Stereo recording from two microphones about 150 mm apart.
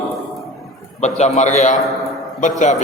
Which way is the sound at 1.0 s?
50° left (ahead or behind).